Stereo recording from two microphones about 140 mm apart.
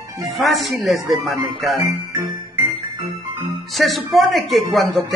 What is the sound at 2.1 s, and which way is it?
Music, 20° right (ahead or behind).